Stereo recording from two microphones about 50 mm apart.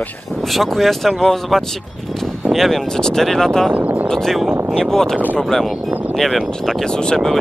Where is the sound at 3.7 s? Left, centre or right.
Right.